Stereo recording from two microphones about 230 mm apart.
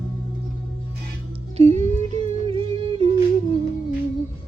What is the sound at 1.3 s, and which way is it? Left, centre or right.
Music, right.